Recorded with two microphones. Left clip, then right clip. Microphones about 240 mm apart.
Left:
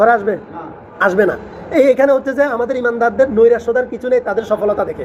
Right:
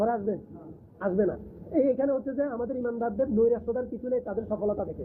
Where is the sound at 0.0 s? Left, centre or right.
Centre.